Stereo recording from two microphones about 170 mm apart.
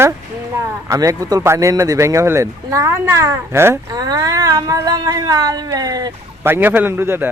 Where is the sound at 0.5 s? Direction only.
20° right (ahead or behind).